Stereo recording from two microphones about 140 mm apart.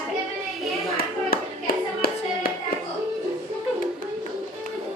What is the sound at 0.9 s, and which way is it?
Hands, 90° left.